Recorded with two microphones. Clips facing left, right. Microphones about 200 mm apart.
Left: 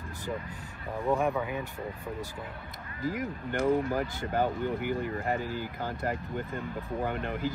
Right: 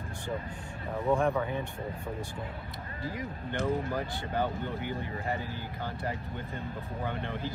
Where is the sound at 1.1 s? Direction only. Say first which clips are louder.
Right 1 dB; 5° left (ahead or behind).